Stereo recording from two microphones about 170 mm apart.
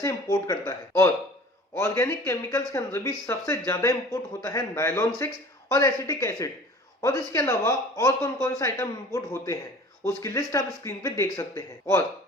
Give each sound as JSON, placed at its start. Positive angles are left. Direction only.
{"t": 0.0, "sound": "speech", "side_deg": 15}